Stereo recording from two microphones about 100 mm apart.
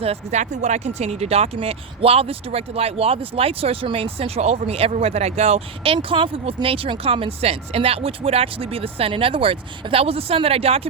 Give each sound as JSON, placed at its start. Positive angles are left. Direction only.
{"t": 0.0, "sound": "speech", "side_deg": -85}